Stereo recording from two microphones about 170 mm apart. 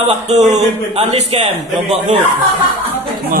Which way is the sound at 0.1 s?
40° right (ahead or behind).